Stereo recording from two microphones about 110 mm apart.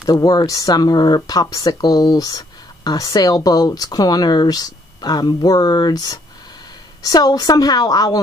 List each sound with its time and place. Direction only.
0.0 s speech: 35° left (ahead or behind)